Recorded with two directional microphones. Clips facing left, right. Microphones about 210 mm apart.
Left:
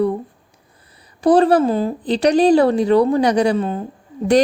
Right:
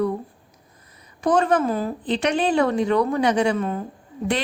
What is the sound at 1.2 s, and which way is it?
A woman's voice, 35° left (ahead or behind).